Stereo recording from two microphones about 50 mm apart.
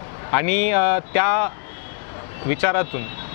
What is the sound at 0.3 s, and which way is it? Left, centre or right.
Speech, left.